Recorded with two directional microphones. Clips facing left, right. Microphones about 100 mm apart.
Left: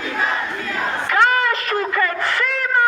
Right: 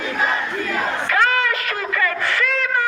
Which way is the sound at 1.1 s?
25° left (ahead or behind).